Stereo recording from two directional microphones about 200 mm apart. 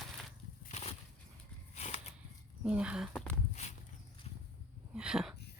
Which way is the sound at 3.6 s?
35° left (ahead or behind).